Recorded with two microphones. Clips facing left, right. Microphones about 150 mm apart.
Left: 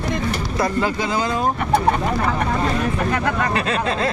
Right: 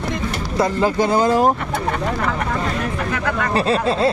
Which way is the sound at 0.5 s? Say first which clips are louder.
Right 4 dB; 30° right (ahead or behind).